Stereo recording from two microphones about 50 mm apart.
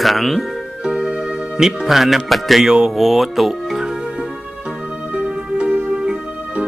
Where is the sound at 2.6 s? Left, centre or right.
Centre.